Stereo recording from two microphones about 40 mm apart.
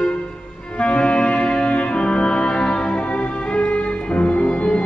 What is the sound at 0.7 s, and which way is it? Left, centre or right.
Music, left.